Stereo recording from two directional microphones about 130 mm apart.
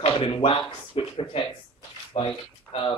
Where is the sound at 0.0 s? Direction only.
45° left (ahead or behind).